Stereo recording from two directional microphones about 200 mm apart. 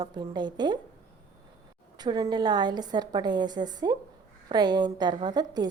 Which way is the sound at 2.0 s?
20° right (ahead or behind).